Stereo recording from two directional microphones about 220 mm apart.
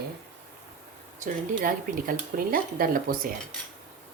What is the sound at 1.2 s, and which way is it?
Speech, 40° right (ahead or behind).